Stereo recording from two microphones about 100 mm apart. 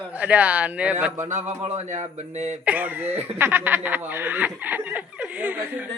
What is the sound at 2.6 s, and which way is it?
Speech, 15° right (ahead or behind).